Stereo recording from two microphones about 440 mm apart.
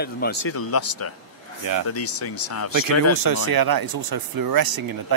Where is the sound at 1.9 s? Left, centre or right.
Left.